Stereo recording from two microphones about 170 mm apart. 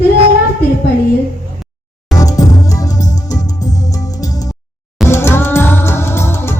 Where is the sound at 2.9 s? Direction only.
45° left (ahead or behind).